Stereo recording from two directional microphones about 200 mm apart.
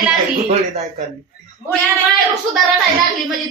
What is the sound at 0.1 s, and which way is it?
Speech, 35° right (ahead or behind).